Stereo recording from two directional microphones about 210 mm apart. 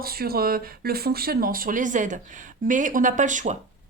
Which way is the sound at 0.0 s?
45° right (ahead or behind).